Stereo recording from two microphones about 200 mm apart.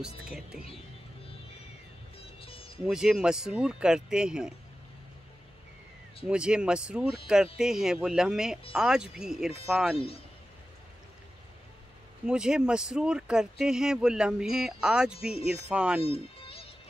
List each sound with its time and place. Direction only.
0.2 s speech: 5° right (ahead or behind)
2.1 s music: 30° left (ahead or behind)
2.8 s speech: 5° right (ahead or behind)
6.2 s speech: 5° right (ahead or behind)
12.3 s speech: 5° right (ahead or behind)
16.0 s music: 30° left (ahead or behind)